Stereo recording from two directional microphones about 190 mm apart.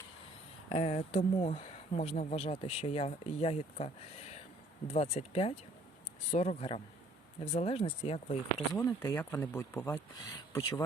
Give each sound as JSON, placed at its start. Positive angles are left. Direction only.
{"t": 0.7, "sound": "speech", "side_deg": 35}
{"t": 8.8, "sound": "speech", "side_deg": 15}